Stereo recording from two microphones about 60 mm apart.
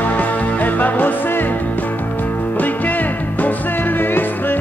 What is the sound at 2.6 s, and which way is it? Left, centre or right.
Music, left.